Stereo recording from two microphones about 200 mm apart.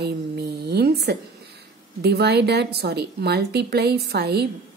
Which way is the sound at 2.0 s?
55° right (ahead or behind).